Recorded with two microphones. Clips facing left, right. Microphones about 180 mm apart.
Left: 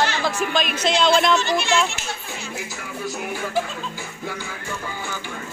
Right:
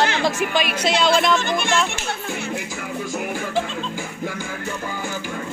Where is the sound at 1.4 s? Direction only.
50° right (ahead or behind).